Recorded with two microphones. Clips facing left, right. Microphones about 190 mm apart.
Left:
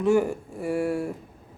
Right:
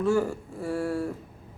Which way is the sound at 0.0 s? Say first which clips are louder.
Left 3 dB; 15° left (ahead or behind).